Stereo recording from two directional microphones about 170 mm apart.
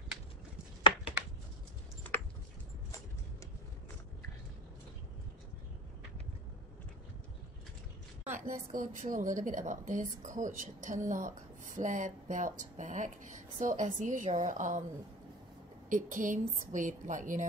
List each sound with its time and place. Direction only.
8.3 s a sound: 50° right (ahead or behind)
8.7 s speech: 50° right (ahead or behind)
15.9 s speech: 50° right (ahead or behind)